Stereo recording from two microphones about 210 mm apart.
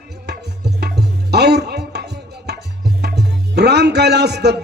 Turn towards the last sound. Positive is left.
turn(degrees=-50)  # may be behind; listen again after turning